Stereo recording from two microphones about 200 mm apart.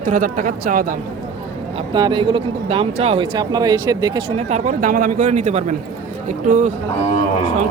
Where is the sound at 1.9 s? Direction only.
20° right (ahead or behind).